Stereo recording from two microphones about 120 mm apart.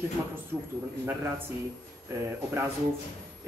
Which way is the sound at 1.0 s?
20° right (ahead or behind).